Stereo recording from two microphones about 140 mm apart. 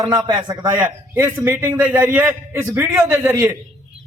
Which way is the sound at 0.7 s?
15° right (ahead or behind).